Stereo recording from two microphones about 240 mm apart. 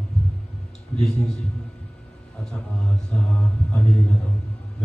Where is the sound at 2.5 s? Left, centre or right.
Centre.